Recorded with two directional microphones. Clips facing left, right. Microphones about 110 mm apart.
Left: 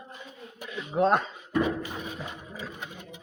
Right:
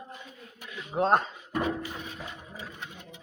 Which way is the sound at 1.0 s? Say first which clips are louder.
Even; 40° right (ahead or behind).